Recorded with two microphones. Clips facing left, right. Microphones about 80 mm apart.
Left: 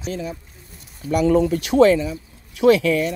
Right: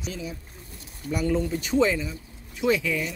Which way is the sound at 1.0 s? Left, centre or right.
Left.